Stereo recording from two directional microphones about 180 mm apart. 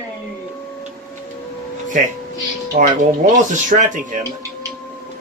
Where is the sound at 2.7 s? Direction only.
50° right (ahead or behind).